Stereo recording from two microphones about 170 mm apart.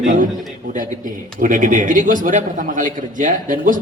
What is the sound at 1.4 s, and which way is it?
Speech, 50° right (ahead or behind).